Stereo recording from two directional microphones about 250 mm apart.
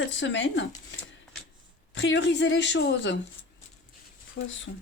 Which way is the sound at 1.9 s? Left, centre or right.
Left.